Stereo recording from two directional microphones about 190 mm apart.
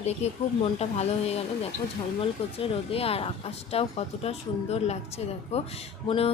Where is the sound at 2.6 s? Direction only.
30° left (ahead or behind).